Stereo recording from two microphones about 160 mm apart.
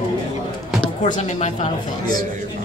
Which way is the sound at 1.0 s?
50° left (ahead or behind).